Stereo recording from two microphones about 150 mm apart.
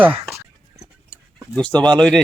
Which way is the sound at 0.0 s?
5° right (ahead or behind).